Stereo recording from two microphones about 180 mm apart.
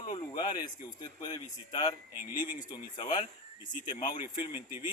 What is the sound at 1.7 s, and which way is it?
Speech, 25° left (ahead or behind).